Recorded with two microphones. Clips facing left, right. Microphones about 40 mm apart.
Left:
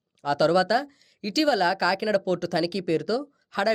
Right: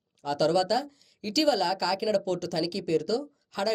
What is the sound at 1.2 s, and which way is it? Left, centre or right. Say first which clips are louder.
Speech: left 2 dB; centre.